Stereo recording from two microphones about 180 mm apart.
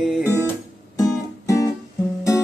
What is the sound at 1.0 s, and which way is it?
Music, 20° left (ahead or behind).